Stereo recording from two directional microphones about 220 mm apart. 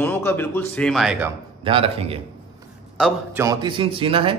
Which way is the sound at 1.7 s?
25° right (ahead or behind).